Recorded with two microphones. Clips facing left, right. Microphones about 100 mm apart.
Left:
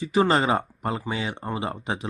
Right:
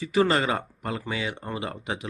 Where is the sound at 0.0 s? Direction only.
25° left (ahead or behind).